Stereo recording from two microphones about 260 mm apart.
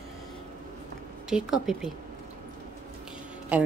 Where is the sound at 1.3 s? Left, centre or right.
Centre.